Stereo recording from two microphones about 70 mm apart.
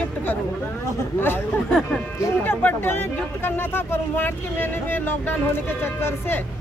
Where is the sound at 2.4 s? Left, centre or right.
Left.